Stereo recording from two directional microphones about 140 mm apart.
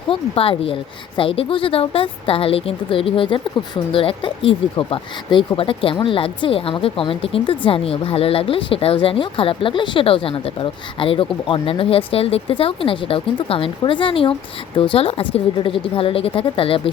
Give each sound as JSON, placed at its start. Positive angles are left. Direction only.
{"t": 0.1, "sound": "speech", "side_deg": 45}